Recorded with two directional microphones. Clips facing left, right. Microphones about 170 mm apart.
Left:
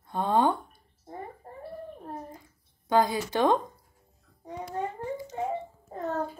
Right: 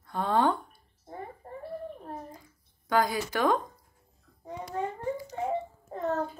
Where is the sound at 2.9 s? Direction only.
25° left (ahead or behind).